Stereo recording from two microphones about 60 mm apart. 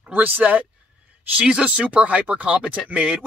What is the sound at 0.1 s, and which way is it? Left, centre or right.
Speech, right.